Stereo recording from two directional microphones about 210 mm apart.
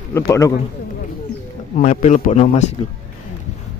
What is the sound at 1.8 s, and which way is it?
Speech, 35° left (ahead or behind).